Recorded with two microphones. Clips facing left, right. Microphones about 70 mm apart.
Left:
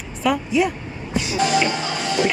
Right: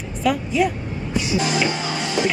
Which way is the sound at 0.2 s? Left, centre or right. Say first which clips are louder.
Even; centre.